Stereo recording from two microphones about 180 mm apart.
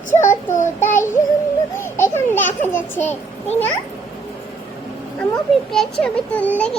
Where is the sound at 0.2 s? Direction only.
45° left (ahead or behind).